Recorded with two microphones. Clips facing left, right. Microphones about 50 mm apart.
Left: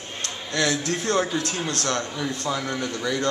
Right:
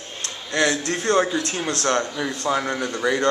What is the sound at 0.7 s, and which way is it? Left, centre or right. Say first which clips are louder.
A man's voice: right 3 dB; centre.